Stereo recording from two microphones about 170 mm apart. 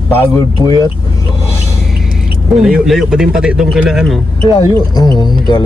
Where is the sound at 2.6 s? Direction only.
5° right (ahead or behind).